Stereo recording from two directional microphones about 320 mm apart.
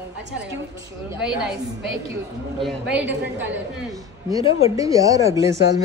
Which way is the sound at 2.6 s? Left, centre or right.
Centre.